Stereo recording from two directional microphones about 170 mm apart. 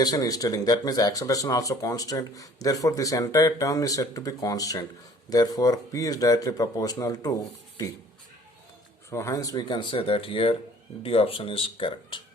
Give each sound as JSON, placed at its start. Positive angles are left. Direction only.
{"t": 0.0, "sound": "speech", "side_deg": 20}
{"t": 9.0, "sound": "speech", "side_deg": 15}